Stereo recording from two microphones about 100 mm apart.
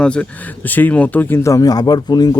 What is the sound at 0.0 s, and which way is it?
Speech, 10° left (ahead or behind).